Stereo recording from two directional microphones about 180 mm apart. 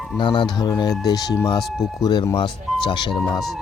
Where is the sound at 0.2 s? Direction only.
25° left (ahead or behind).